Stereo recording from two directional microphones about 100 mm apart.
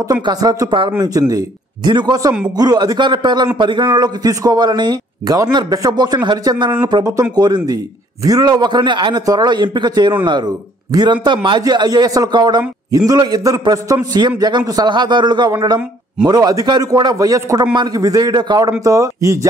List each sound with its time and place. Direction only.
0.1 s a man's voice: 40° right (ahead or behind)
16.3 s a man's voice: 40° right (ahead or behind)
18.7 s a man's voice: 30° right (ahead or behind)